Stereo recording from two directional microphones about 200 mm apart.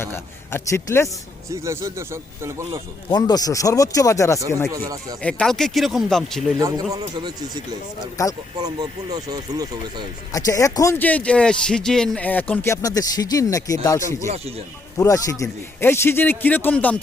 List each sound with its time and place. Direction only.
0.0 s speech: 10° left (ahead or behind)
1.5 s speech: 15° right (ahead or behind)
3.1 s speech: 20° left (ahead or behind)
4.7 s speech: 20° right (ahead or behind)
5.2 s speech: 5° left (ahead or behind)
6.6 s speech: 15° right (ahead or behind)
8.2 s speech: 15° left (ahead or behind)
8.6 s speech: 20° right (ahead or behind)
10.3 s speech: 15° left (ahead or behind)
14.3 s speech: 30° right (ahead or behind)
14.9 s speech: 15° left (ahead or behind)